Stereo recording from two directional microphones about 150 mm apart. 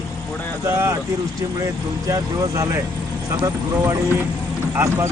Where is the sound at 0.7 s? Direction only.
15° right (ahead or behind).